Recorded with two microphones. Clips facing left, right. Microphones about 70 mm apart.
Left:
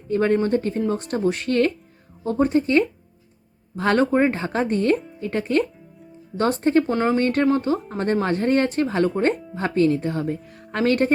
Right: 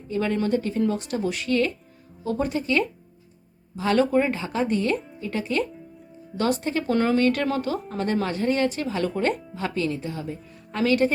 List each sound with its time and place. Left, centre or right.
0.1 s speech: left
2.2 s speech: left
6.9 s speech: centre
7.2 s speech: left